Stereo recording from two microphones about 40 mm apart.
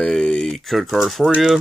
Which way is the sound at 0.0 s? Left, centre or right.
Left.